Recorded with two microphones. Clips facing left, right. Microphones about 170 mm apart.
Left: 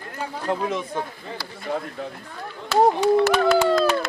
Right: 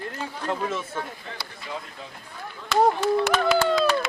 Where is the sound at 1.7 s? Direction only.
50° left (ahead or behind).